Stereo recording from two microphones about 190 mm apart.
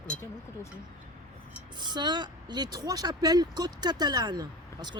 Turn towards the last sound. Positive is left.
turn(degrees=-20)  # may be behind; listen again after turning